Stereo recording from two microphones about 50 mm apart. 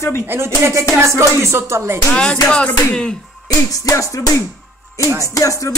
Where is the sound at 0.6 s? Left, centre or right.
Right.